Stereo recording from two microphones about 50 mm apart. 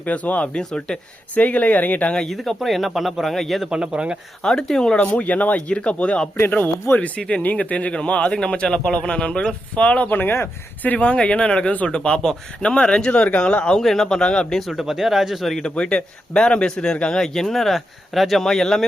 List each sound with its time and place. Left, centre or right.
0.0 s a man's voice: left
0.5 s speech: centre
1.4 s speech: left
2.3 s speech: centre
3.7 s speech: centre
4.4 s speech: centre
5.1 s a man's voice: left
6.9 s speech: left
7.2 s a man's voice: left
10.1 s speech: left
10.8 s a man's voice: left
13.7 s speech: centre
14.7 s speech: centre
15.5 s speech: left